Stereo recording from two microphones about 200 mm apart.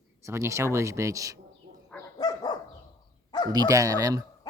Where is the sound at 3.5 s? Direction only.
15° right (ahead or behind).